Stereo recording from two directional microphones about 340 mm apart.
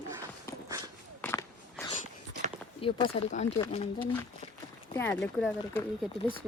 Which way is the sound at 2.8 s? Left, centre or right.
Centre.